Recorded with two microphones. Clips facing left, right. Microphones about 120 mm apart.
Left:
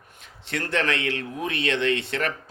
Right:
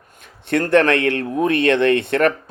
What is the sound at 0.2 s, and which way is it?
A man's voice, 55° right (ahead or behind).